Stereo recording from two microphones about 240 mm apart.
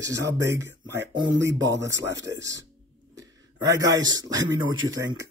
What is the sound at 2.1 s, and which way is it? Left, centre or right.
Speech, right.